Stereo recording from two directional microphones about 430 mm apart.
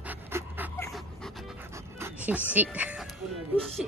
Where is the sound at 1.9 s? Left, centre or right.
Centre.